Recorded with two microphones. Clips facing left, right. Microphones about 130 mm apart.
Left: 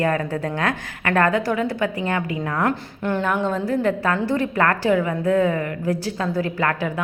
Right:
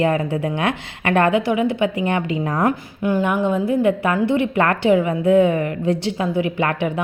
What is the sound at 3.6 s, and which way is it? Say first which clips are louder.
A woman's voice: right 3 dB; 20° right (ahead or behind).